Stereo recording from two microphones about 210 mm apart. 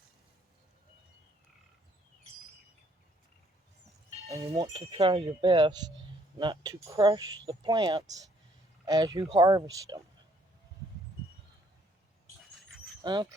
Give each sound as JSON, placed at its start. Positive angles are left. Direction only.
{"t": 4.3, "sound": "speech", "side_deg": -15}
{"t": 13.0, "sound": "speech", "side_deg": -20}